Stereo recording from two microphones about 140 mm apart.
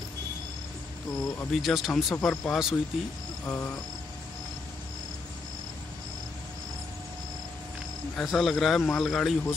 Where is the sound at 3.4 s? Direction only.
15° left (ahead or behind).